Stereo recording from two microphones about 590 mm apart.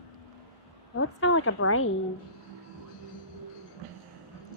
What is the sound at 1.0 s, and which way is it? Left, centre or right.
Speech, centre.